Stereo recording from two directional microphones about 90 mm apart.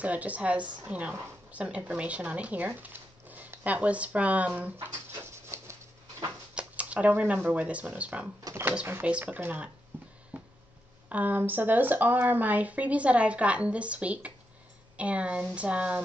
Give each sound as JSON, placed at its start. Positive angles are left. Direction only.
{"t": 0.0, "sound": "a woman's voice", "side_deg": -15}
{"t": 5.3, "sound": "a sound", "side_deg": -30}
{"t": 6.5, "sound": "speech", "side_deg": -15}
{"t": 9.9, "sound": "music", "side_deg": -20}
{"t": 10.3, "sound": "a sound", "side_deg": -20}
{"t": 11.1, "sound": "a woman's voice", "side_deg": -20}